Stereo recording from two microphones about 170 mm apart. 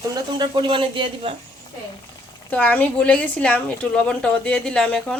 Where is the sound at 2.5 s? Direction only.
10° left (ahead or behind).